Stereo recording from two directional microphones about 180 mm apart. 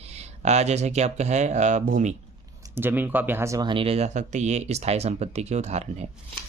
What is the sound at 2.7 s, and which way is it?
Speech, 10° right (ahead or behind).